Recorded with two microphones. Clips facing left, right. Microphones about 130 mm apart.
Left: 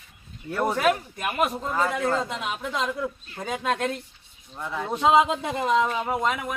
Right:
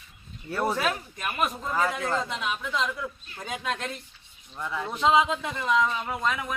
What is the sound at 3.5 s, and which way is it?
Speech, 40° left (ahead or behind).